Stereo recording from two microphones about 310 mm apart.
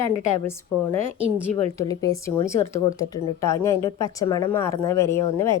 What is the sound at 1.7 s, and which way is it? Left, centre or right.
Speech, centre.